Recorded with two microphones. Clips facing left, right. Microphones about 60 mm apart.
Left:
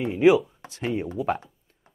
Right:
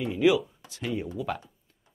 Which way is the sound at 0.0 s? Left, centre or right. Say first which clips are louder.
Left 5 dB; left.